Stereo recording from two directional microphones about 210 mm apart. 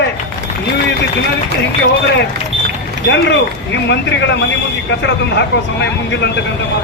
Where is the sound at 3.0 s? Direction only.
55° left (ahead or behind).